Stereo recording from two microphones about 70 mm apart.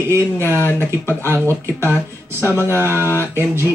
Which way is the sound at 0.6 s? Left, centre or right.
Left.